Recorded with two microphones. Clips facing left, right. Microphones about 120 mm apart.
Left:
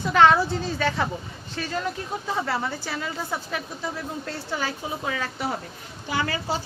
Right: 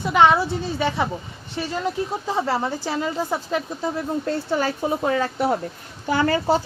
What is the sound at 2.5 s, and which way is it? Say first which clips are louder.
A woman's voice: right 5 dB; 35° right (ahead or behind).